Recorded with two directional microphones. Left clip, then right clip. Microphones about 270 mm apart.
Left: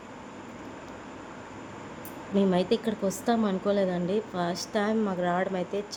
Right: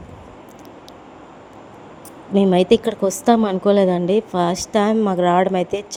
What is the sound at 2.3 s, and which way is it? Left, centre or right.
A woman's voice, right.